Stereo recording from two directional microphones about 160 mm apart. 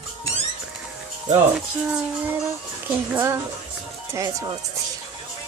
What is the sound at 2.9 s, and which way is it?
Speech, 15° right (ahead or behind).